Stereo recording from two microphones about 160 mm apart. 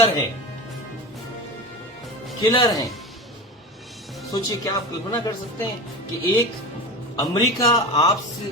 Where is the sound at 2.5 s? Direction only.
25° left (ahead or behind).